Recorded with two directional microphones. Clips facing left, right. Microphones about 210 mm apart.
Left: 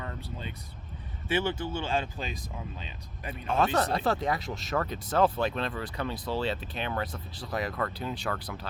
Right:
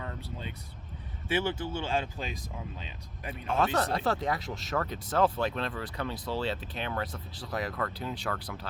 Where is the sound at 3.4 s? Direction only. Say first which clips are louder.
Left 2 dB; 20° left (ahead or behind).